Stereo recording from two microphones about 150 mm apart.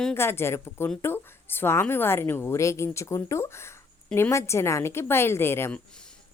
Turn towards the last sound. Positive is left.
turn(degrees=5)  # may be behind; listen again after turning